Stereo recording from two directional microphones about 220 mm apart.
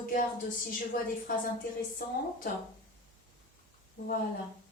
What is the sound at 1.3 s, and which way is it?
Speech, 40° left (ahead or behind).